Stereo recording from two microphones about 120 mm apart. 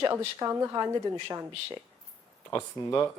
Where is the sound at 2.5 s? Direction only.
20° left (ahead or behind).